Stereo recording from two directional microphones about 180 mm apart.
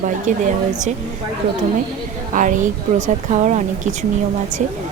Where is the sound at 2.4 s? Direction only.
45° right (ahead or behind).